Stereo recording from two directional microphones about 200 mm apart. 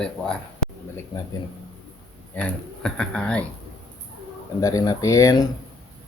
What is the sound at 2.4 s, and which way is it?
A man's voice, 5° left (ahead or behind).